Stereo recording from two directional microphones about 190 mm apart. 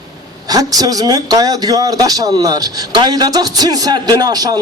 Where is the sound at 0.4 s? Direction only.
20° right (ahead or behind).